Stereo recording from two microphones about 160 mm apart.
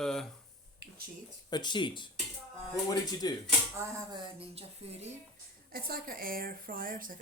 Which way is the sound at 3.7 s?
20° right (ahead or behind).